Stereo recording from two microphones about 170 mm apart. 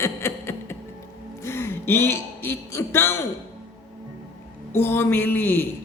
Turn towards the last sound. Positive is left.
turn(degrees=10)  # may be behind; listen again after turning